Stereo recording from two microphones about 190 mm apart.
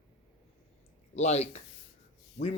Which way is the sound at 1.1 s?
35° left (ahead or behind).